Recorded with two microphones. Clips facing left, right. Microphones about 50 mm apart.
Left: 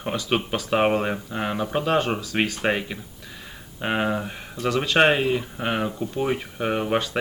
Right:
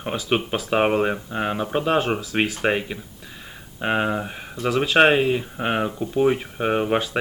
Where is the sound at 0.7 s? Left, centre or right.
Centre.